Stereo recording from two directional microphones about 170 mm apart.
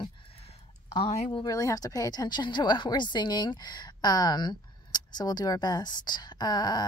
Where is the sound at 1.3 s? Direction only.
20° left (ahead or behind).